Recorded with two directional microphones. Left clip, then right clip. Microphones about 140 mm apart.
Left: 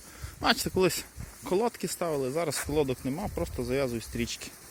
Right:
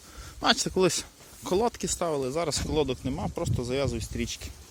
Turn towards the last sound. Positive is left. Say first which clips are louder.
# even
turn(degrees=0)  # may be behind; listen again after turning